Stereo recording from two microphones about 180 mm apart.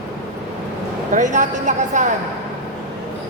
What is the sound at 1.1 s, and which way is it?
A woman's voice, 45° right (ahead or behind).